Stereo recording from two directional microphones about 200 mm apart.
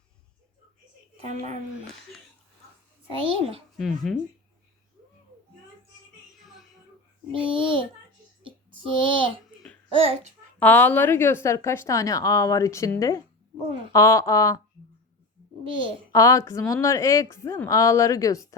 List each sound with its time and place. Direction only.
3.1 s a child's voice: 25° right (ahead or behind)
3.8 s speech: centre (ahead or behind)
6.4 s music: centre (ahead or behind)
7.5 s a child's voice: 25° right (ahead or behind)
8.4 s a sound: 25° right (ahead or behind)
10.0 s a child's voice: 30° right (ahead or behind)
10.6 s a woman's voice: 10° left (ahead or behind)
16.1 s a woman's voice: 15° left (ahead or behind)